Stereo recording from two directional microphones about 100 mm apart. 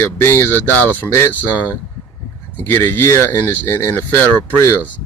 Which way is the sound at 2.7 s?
20° left (ahead or behind).